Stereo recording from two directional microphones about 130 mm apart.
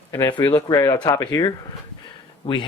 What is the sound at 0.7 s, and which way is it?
Speech, 30° left (ahead or behind).